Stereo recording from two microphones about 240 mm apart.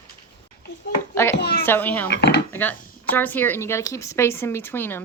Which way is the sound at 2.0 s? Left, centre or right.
Left.